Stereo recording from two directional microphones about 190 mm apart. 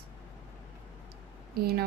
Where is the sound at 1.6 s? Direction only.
55° right (ahead or behind).